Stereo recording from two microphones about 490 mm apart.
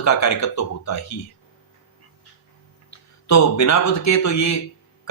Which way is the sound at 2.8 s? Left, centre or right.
Left.